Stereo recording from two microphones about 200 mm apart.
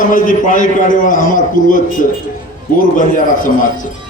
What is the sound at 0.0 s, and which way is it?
A man's voice, 40° left (ahead or behind).